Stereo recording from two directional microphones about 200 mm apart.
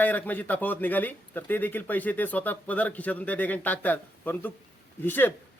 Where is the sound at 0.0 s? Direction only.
10° left (ahead or behind).